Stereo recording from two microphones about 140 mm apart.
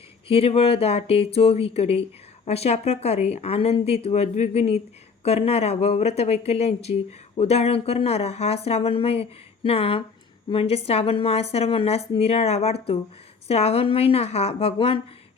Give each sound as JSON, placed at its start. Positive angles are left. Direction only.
{"t": 0.3, "sound": "speech", "side_deg": 45}